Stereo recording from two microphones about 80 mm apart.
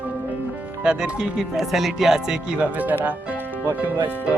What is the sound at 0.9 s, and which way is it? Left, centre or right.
Speech, centre.